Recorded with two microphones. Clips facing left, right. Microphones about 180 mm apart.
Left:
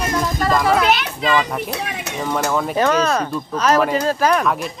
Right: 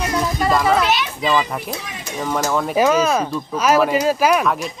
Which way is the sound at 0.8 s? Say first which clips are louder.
Left 2 dB; 60° left (ahead or behind).